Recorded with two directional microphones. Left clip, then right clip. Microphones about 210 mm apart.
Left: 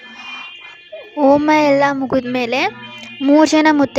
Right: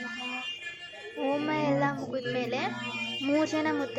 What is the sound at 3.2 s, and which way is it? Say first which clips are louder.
Speech: left 17 dB; 35° left (ahead or behind).